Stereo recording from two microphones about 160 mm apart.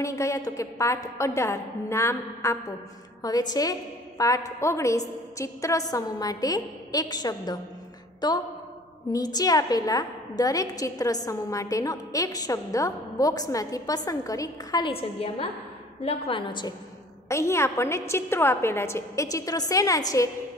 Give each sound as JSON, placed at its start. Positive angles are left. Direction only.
{"t": 0.0, "sound": "a woman's voice", "side_deg": 20}
{"t": 14.9, "sound": "a woman's voice", "side_deg": 35}
{"t": 17.3, "sound": "a woman's voice", "side_deg": 15}